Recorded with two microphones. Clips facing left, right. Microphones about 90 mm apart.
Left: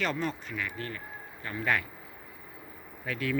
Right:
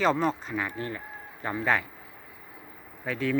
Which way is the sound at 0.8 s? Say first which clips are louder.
Right 4 dB; 20° right (ahead or behind).